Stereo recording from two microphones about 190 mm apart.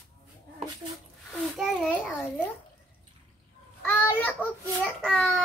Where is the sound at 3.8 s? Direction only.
10° left (ahead or behind).